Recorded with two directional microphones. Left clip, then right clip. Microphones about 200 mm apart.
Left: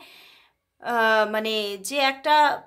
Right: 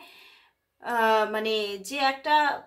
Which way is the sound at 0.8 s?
35° left (ahead or behind).